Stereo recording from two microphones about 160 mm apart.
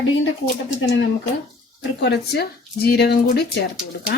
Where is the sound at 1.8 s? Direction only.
90° left.